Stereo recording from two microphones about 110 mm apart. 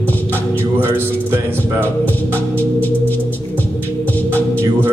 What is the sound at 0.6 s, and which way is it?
Speech, 20° right (ahead or behind).